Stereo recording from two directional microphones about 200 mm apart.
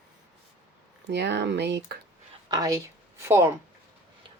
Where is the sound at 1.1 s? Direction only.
55° right (ahead or behind).